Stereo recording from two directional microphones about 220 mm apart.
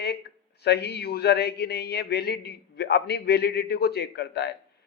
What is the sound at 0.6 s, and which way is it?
Speech, 50° left (ahead or behind).